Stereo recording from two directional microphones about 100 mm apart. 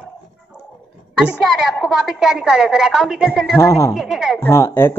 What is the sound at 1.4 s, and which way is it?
A woman's voice, 5° right (ahead or behind).